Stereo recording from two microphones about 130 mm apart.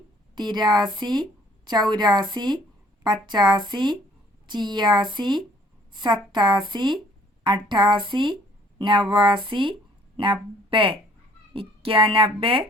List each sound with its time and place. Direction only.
0.3 s a woman's voice: 35° right (ahead or behind)